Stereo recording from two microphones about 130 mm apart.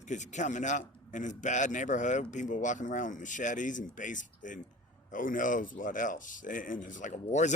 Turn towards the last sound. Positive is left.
turn(degrees=65)  # may be behind; listen again after turning